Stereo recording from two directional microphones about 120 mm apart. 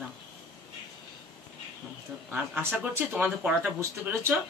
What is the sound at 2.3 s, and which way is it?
Speech, 15° right (ahead or behind).